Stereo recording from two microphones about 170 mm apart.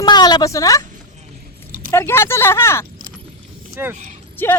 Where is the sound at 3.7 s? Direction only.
15° right (ahead or behind).